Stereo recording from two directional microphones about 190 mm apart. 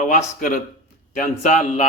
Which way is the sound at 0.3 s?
45° left (ahead or behind).